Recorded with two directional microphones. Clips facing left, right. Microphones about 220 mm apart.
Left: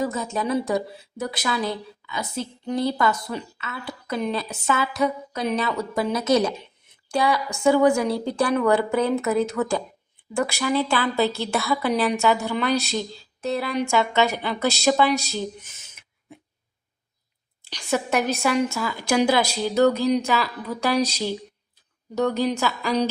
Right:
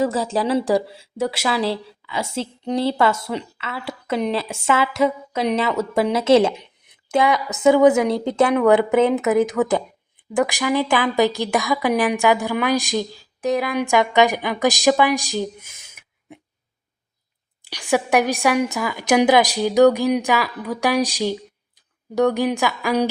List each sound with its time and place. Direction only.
0.0 s a woman's voice: 30° right (ahead or behind)
4.0 s a woman's voice: 85° right
4.4 s a woman's voice: 25° right (ahead or behind)
5.3 s a woman's voice: 90° right
5.9 s a woman's voice: 25° right (ahead or behind)
17.6 s a woman's voice: 15° right (ahead or behind)